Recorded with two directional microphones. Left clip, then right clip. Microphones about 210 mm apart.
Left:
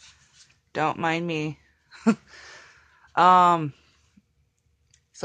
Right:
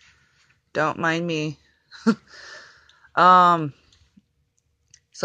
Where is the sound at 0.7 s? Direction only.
10° right (ahead or behind).